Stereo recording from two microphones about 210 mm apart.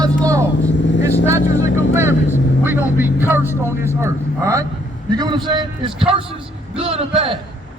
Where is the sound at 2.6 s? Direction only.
10° right (ahead or behind); by 7.4 s 25° right (ahead or behind).